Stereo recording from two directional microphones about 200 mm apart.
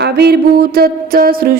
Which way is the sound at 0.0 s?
55° right (ahead or behind).